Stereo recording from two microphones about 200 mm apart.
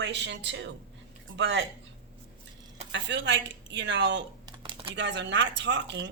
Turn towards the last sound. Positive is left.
turn(degrees=-60)  # may be behind; listen again after turning